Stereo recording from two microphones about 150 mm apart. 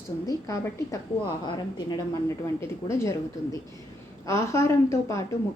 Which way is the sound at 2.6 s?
20° left (ahead or behind).